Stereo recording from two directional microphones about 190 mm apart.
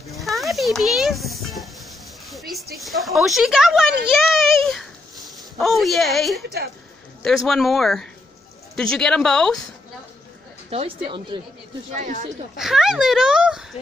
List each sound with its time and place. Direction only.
0.1 s a child's voice: centre (ahead or behind)
10.7 s speech: 30° right (ahead or behind)
11.9 s speech: 40° right (ahead or behind)
12.5 s speech: centre (ahead or behind)